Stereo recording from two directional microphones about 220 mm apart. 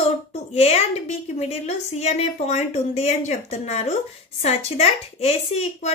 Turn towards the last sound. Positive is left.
turn(degrees=30)  # may be behind; listen again after turning